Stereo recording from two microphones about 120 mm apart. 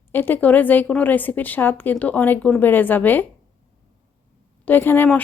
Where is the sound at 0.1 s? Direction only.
15° left (ahead or behind).